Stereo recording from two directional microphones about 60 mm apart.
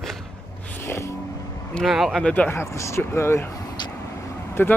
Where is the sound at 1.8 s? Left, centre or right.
Centre.